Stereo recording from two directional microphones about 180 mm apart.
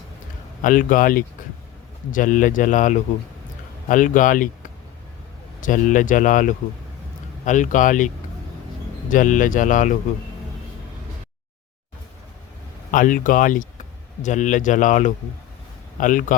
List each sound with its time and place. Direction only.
0.6 s speech: 45° left (ahead or behind)
5.5 s speech: 45° left (ahead or behind)
12.9 s speech: 45° left (ahead or behind)